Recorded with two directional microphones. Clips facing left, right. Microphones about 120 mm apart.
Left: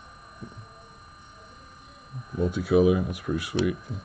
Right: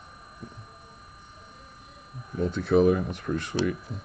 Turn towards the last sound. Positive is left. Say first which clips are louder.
# left 1 dB
turn(degrees=10)  # may be behind; listen again after turning